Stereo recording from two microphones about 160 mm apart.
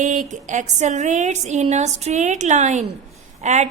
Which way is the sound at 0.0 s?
50° right (ahead or behind).